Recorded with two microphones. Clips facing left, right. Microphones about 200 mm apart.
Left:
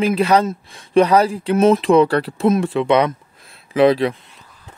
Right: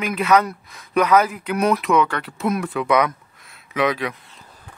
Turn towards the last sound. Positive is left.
turn(degrees=30)  # may be behind; listen again after turning